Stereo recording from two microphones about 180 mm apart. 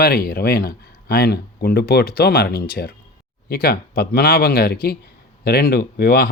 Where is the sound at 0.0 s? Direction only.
55° left (ahead or behind).